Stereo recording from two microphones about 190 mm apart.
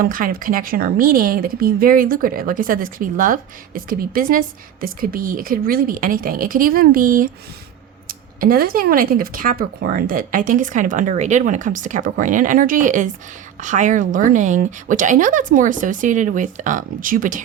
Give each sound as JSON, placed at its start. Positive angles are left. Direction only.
{"t": 0.0, "sound": "speech", "side_deg": -50}